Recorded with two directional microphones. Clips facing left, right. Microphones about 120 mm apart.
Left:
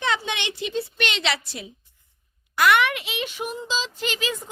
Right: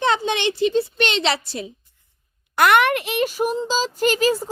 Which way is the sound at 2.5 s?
55° right (ahead or behind).